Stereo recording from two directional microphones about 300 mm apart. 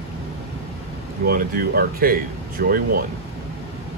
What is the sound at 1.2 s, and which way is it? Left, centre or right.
Speech, right.